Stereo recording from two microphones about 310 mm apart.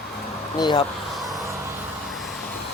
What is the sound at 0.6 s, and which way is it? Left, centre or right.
Speech, centre.